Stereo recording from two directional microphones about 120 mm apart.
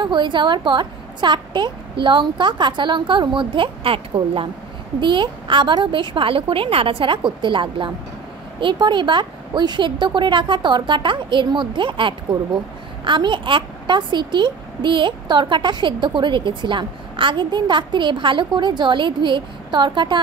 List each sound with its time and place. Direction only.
0.0 s a woman's voice: 40° right (ahead or behind)